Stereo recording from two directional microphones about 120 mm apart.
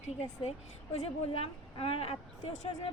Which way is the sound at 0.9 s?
55° left (ahead or behind).